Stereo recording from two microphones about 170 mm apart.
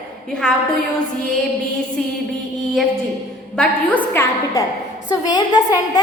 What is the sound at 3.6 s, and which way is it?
A woman's voice, 10° left (ahead or behind).